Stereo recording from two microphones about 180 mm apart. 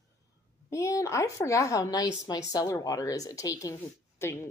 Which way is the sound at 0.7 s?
15° left (ahead or behind).